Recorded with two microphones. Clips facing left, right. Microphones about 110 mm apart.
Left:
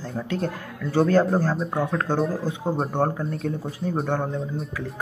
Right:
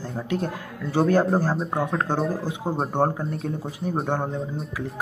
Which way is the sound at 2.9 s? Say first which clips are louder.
Right 1 dB; 25° right (ahead or behind).